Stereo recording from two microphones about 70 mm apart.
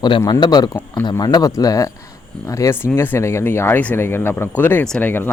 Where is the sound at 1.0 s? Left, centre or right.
Left.